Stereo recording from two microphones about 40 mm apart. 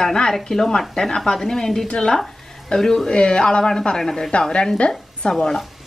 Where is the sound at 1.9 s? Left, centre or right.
Left.